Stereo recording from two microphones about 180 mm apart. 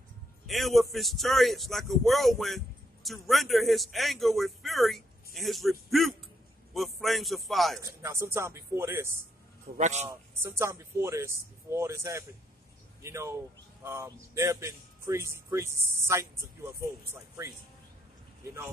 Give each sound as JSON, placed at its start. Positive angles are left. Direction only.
{"t": 0.5, "sound": "speech", "side_deg": 0}
{"t": 7.8, "sound": "speech", "side_deg": -15}
{"t": 9.8, "sound": "a man's voice", "side_deg": -40}
{"t": 10.0, "sound": "speech", "side_deg": -15}